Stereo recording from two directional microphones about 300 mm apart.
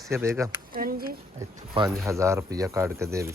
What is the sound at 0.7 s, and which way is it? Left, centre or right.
Speech, right.